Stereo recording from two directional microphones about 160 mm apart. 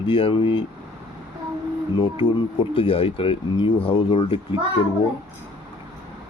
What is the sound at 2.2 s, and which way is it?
Speech, 35° left (ahead or behind).